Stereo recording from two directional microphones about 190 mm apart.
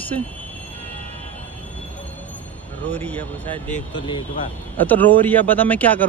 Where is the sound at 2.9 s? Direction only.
10° left (ahead or behind).